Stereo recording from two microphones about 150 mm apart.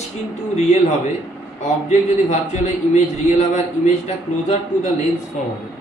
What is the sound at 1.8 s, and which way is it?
A man's voice, 50° left (ahead or behind).